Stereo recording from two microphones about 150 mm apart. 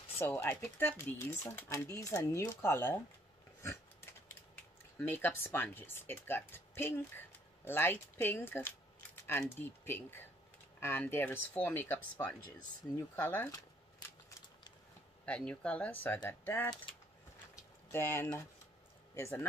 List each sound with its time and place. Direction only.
0.2 s speech: 15° left (ahead or behind)
4.9 s speech: 10° left (ahead or behind)
15.2 s speech: 5° left (ahead or behind)
17.9 s speech: 15° left (ahead or behind)